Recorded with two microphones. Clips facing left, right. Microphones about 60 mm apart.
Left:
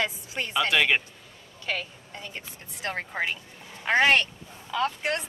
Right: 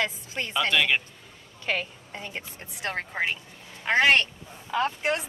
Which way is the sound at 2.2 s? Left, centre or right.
Right.